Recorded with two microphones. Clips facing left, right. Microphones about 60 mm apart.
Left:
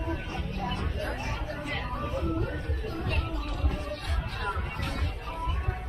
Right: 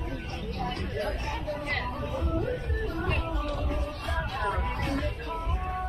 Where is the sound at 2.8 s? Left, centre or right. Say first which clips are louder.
Right 2 dB; right.